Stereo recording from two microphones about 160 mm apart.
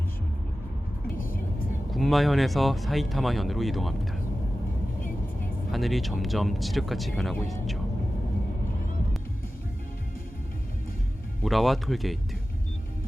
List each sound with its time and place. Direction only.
1.2 s vehicle: 60° left (ahead or behind)
1.9 s speech: centre (ahead or behind)
5.7 s speech: centre (ahead or behind)
11.4 s speech: centre (ahead or behind)